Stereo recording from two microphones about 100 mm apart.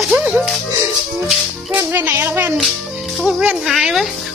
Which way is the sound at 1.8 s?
20° right (ahead or behind).